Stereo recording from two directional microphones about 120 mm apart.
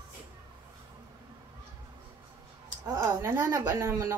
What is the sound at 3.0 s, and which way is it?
A woman's voice, 20° right (ahead or behind).